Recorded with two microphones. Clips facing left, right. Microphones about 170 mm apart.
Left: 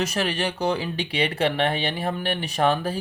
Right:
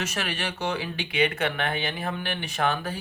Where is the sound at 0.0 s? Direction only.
35° left (ahead or behind).